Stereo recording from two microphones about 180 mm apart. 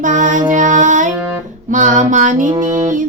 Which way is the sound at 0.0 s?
45° right (ahead or behind).